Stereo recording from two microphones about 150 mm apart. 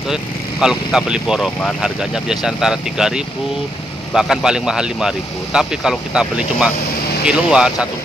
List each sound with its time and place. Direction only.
0.1 s speech: 5° right (ahead or behind)